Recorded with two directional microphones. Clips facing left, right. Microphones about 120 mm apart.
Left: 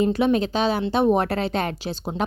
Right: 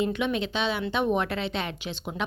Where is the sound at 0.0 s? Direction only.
35° left (ahead or behind).